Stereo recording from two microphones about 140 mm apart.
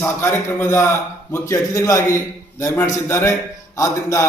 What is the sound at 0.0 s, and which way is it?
A man's voice, 20° left (ahead or behind).